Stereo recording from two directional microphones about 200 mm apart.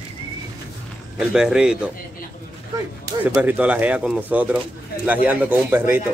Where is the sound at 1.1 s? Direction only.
5° right (ahead or behind).